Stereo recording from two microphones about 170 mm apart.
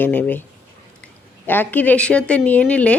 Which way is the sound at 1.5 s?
10° left (ahead or behind).